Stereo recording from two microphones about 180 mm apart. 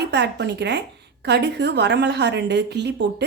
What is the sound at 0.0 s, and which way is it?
A woman's voice, 70° right (ahead or behind).